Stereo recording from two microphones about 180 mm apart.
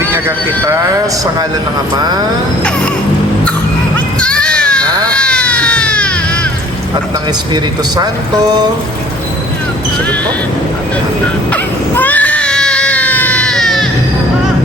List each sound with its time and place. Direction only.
0.0 s a man's voice: 15° right (ahead or behind)
3.9 s a sound: 5° left (ahead or behind)
5.1 s baby cry: 5° left (ahead or behind)
7.5 s speech: 20° right (ahead or behind)
11.5 s baby cry: 10° left (ahead or behind)